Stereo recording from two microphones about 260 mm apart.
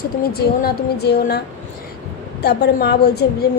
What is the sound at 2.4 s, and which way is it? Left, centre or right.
Speech, left.